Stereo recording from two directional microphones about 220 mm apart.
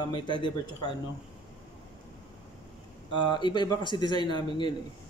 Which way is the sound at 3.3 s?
20° left (ahead or behind).